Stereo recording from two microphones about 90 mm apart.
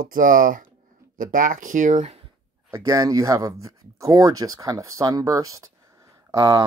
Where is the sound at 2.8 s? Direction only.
40° right (ahead or behind).